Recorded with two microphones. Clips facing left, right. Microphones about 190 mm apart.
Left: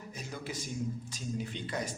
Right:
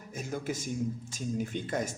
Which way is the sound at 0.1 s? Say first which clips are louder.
Right 7 dB; 50° right (ahead or behind).